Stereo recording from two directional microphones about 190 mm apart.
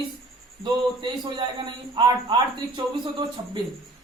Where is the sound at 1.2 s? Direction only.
25° right (ahead or behind).